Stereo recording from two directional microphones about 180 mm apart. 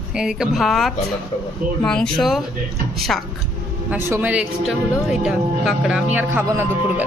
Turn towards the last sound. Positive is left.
turn(degrees=-10)  # may be behind; listen again after turning